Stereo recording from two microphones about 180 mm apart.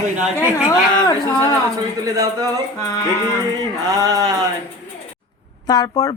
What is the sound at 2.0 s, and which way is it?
Speech, 20° right (ahead or behind).